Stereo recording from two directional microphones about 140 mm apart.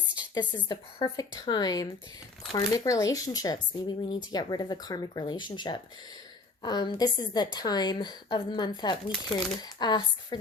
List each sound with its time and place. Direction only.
0.3 s a woman's voice: 35° left (ahead or behind)